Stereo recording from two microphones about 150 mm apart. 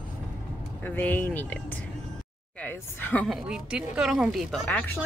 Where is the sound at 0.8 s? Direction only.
15° left (ahead or behind).